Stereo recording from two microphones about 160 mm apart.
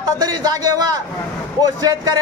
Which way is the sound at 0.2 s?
25° right (ahead or behind).